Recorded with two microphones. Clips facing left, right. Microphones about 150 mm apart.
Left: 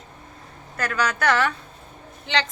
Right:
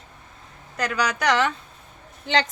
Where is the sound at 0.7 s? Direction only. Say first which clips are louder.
Even; 15° right (ahead or behind).